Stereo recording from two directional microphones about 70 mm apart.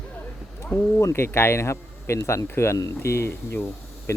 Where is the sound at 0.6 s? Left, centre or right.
Left.